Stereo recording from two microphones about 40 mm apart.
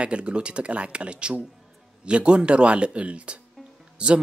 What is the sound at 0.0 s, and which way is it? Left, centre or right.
Speech, right.